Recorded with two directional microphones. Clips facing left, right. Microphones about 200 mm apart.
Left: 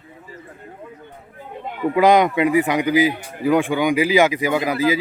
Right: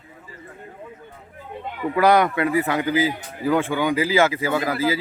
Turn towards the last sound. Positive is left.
turn(degrees=15)  # may be behind; listen again after turning